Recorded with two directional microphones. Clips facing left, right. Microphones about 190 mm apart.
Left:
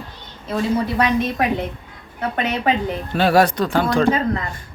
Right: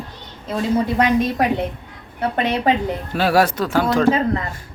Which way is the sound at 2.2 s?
30° right (ahead or behind).